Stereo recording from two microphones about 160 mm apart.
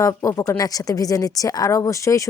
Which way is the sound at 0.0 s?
20° left (ahead or behind).